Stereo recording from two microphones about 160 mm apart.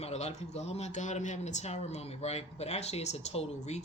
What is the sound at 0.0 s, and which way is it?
Speech, 45° left (ahead or behind).